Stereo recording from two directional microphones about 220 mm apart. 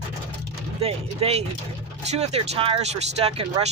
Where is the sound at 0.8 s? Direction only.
30° right (ahead or behind).